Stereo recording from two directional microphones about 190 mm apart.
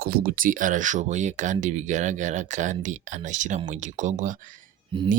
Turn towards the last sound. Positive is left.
turn(degrees=-25)  # may be behind; listen again after turning